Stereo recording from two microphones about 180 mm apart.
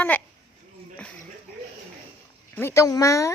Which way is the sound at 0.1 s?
10° left (ahead or behind).